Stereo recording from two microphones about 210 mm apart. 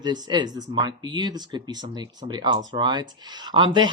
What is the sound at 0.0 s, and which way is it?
Speech, 20° right (ahead or behind).